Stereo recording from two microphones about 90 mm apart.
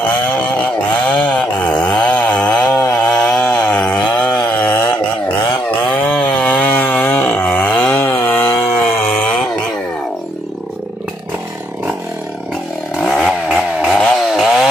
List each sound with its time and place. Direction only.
1.1 s chainsaw: 15° left (ahead or behind)
5.9 s a sound: 20° left (ahead or behind)
7.9 s chainsaw: 25° left (ahead or behind)
12.9 s chainsaw: 5° left (ahead or behind)